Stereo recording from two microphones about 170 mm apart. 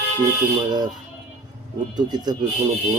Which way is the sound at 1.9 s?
25° right (ahead or behind).